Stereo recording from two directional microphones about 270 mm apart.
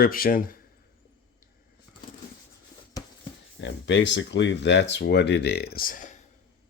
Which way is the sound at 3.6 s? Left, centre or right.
Left.